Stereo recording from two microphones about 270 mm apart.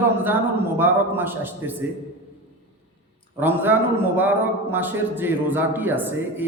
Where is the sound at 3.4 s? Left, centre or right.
Centre.